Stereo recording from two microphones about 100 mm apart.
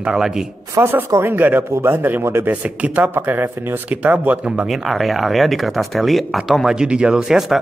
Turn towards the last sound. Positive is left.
turn(degrees=-5)  # may be behind; listen again after turning